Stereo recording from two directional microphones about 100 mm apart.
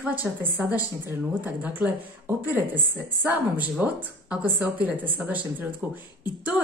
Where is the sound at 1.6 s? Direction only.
15° right (ahead or behind).